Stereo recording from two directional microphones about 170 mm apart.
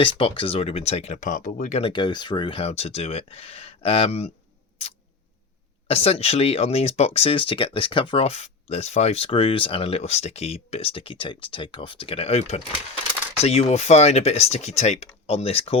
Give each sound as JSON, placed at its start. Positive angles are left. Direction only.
{"t": 0.0, "sound": "speech", "side_deg": 30}
{"t": 1.8, "sound": "speech", "side_deg": 25}
{"t": 5.9, "sound": "speech", "side_deg": 35}